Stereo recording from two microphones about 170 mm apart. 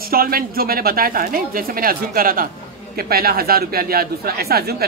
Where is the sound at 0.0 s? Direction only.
60° right (ahead or behind).